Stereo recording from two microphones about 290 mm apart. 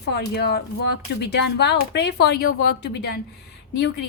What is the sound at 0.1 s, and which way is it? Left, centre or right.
Speech, left.